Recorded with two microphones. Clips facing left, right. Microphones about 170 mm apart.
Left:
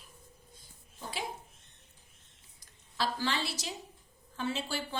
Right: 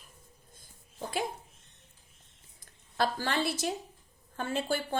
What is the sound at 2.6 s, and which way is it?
Speech, 50° right (ahead or behind).